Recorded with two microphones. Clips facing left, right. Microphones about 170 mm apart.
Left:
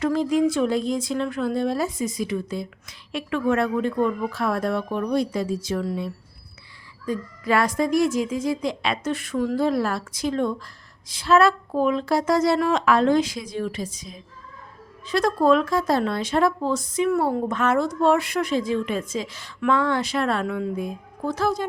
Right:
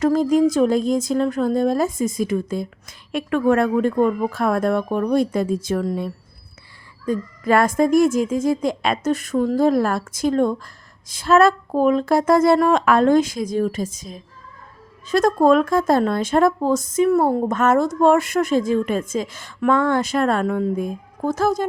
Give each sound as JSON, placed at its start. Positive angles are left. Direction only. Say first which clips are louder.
{"t": 0.0, "sound": "speech", "louder": "right 4 dB", "side_deg": -45}